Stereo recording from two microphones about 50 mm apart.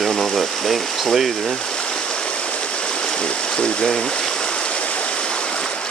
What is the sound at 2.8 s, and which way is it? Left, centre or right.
Stream, centre.